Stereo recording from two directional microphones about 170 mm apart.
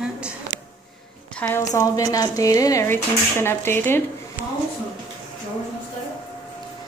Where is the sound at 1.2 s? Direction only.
10° left (ahead or behind).